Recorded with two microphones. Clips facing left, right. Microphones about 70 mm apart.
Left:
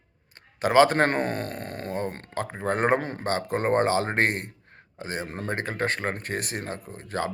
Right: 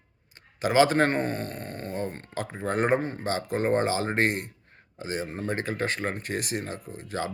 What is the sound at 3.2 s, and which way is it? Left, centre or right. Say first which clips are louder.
Speech: left 2 dB; left.